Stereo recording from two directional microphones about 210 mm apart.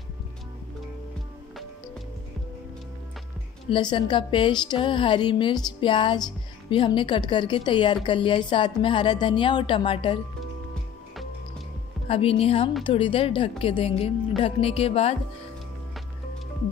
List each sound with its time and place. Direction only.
3.7 s a woman's voice: 25° left (ahead or behind)
12.1 s a woman's voice: 25° left (ahead or behind)